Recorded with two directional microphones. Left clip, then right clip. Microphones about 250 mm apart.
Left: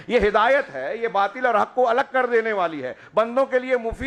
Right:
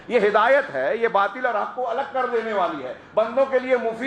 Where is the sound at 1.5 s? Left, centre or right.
Left.